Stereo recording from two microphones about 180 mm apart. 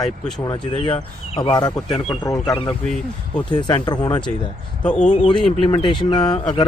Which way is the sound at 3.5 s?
25° left (ahead or behind).